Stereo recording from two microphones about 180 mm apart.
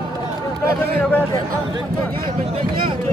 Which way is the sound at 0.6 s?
60° right (ahead or behind).